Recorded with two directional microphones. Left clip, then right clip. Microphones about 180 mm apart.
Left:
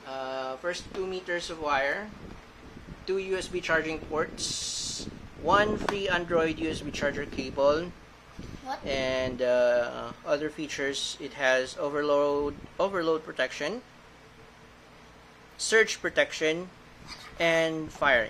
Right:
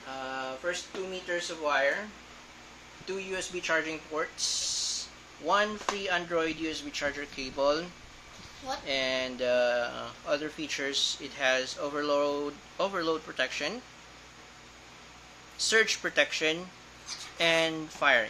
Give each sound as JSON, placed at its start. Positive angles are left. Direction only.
{"t": 0.1, "sound": "a sound", "side_deg": 20}
{"t": 1.2, "sound": "speech", "side_deg": 20}
{"t": 3.1, "sound": "speech", "side_deg": 35}
{"t": 15.5, "sound": "speech", "side_deg": 35}